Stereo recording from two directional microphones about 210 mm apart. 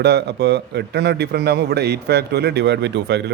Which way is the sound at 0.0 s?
55° right (ahead or behind).